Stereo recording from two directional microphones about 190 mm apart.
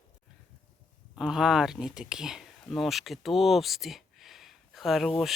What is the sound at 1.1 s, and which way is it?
Speech, centre (ahead or behind).